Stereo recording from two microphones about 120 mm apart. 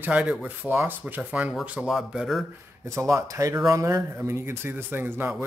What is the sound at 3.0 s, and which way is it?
Speech, 25° right (ahead or behind).